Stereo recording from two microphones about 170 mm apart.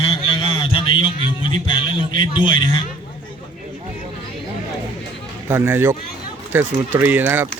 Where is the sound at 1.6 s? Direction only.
30° left (ahead or behind).